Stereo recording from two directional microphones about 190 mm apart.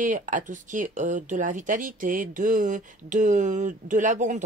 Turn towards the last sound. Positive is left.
turn(degrees=-40)  # may be behind; listen again after turning